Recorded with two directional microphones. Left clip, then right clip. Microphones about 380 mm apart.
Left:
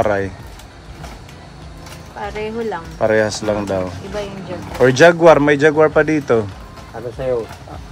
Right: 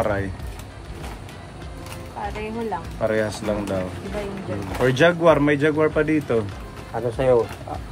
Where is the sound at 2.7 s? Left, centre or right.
Centre.